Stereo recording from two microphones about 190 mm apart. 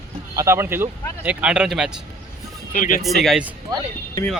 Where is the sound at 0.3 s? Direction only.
15° right (ahead or behind).